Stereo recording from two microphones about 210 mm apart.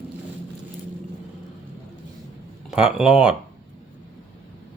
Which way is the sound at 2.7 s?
5° right (ahead or behind).